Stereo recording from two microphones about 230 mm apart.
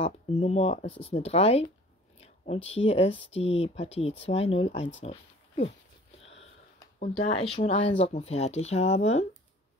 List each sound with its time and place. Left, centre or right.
0.0 s speech: left
5.0 s a sound: left
7.0 s speech: left